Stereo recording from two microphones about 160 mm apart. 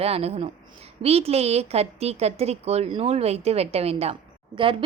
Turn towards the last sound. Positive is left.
turn(degrees=-35)  # may be behind; listen again after turning